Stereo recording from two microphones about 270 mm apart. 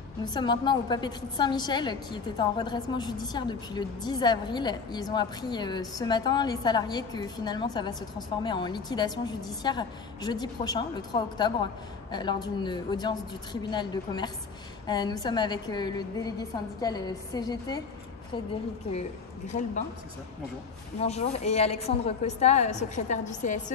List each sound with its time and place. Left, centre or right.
0.2 s a woman's voice: centre
18.9 s a woman's voice: left
21.0 s a woman's voice: left